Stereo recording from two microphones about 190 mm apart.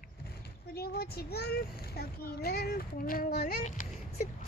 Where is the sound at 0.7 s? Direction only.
55° left (ahead or behind).